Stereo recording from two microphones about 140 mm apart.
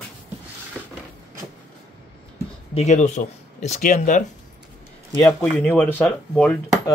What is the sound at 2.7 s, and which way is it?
Speech, 55° left (ahead or behind).